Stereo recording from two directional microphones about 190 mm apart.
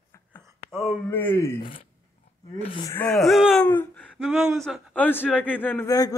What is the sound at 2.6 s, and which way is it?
Speech, 25° left (ahead or behind).